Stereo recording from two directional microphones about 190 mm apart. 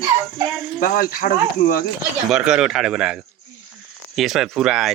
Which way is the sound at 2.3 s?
5° right (ahead or behind).